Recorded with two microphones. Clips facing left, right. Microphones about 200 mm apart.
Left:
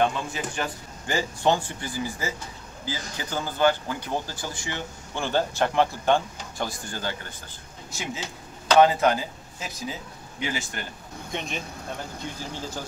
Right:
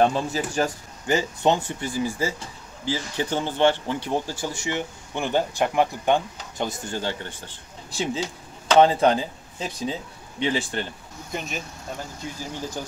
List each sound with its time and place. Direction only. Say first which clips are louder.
0.0 s speech: right 4 dB; 35° right (ahead or behind)
1.0 s speech: right 3 dB; 20° right (ahead or behind)
11.3 s speech: right 1 dB; 5° right (ahead or behind)